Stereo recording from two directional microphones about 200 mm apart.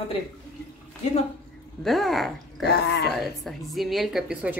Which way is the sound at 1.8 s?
Centre (ahead or behind).